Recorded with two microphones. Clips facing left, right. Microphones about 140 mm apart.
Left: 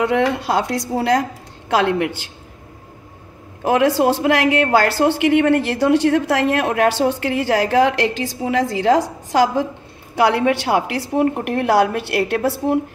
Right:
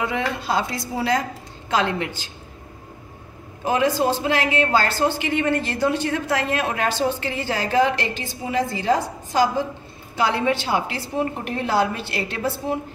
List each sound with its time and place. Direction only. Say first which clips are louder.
0.0 s speech: left 7 dB; 65° left (ahead or behind)
3.6 s a woman's voice: left 5 dB; 70° left (ahead or behind)
10.1 s a woman's voice: left 5 dB; 70° left (ahead or behind)